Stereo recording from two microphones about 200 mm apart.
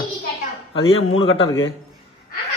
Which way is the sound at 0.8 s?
30° left (ahead or behind).